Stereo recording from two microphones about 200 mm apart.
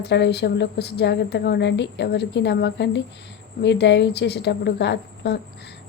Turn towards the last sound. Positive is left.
turn(degrees=55)  # may be behind; listen again after turning